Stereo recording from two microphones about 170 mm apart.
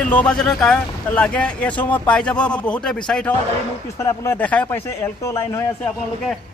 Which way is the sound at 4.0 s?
15° left (ahead or behind).